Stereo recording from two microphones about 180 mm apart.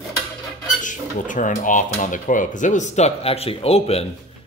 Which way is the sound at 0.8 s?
45° left (ahead or behind).